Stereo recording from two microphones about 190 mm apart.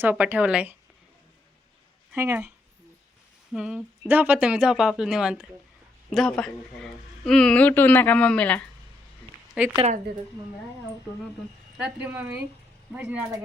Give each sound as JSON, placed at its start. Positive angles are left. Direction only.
{"t": 0.0, "sound": "speech", "side_deg": -10}
{"t": 2.1, "sound": "speech", "side_deg": -10}
{"t": 3.5, "sound": "a woman's voice", "side_deg": -5}
{"t": 9.7, "sound": "a woman's voice", "side_deg": -35}
{"t": 12.0, "sound": "speech", "side_deg": -10}